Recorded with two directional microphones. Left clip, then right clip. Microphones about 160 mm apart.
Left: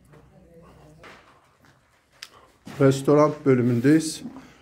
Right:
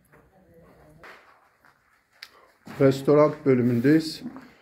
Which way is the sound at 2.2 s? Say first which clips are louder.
Left 2 dB; 5° left (ahead or behind).